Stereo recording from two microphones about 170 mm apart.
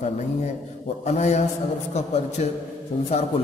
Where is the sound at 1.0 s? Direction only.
40° left (ahead or behind).